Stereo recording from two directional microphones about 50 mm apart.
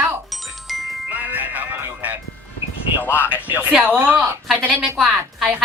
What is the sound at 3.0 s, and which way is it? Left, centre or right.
Speech, left.